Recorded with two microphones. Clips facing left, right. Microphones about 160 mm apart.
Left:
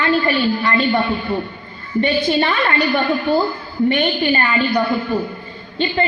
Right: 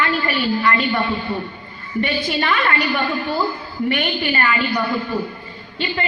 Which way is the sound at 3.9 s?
30° left (ahead or behind).